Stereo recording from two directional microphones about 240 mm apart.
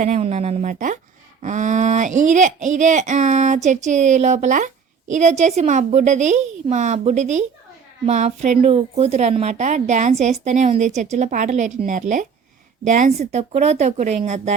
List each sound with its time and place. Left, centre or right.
0.0 s speech: right